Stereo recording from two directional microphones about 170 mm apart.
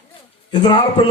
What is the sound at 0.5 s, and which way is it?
Speech, 25° left (ahead or behind).